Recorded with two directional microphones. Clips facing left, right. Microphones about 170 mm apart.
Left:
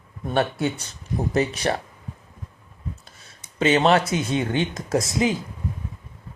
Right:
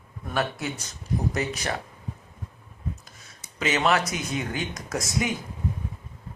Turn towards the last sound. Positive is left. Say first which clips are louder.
# left 6 dB
turn(degrees=25)  # may be behind; listen again after turning